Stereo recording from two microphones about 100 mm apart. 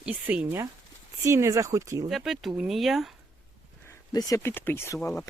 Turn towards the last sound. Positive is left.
turn(degrees=25)  # may be behind; listen again after turning